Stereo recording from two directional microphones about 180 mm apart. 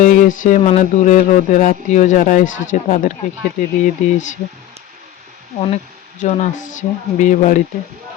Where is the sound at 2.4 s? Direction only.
90° left.